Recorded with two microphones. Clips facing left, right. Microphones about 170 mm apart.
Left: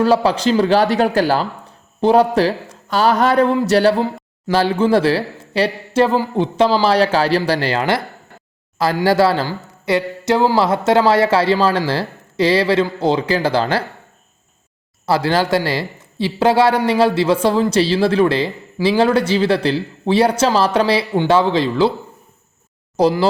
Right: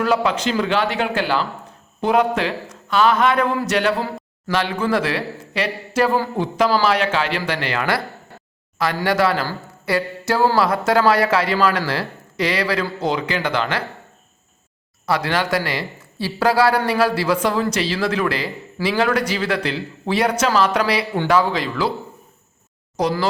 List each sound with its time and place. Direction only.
0.0 s speech: 30° left (ahead or behind)
9.0 s speech: 30° left (ahead or behind)
15.0 s speech: 30° left (ahead or behind)
23.0 s speech: 30° left (ahead or behind)